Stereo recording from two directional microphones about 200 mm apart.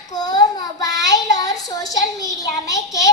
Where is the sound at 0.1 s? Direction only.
20° left (ahead or behind).